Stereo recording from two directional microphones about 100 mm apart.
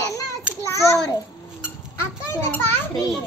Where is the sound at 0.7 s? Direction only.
30° left (ahead or behind).